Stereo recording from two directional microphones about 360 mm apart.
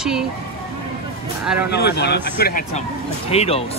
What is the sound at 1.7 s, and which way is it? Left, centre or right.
Speech, left.